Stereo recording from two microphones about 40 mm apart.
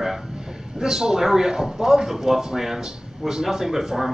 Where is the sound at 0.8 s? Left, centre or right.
Centre.